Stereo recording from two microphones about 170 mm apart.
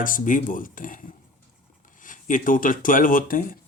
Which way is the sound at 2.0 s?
50° left (ahead or behind).